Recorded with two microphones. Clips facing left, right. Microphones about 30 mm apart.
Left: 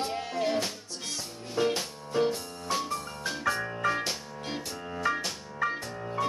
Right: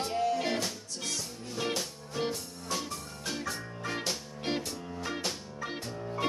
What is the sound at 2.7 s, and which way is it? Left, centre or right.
Music, left.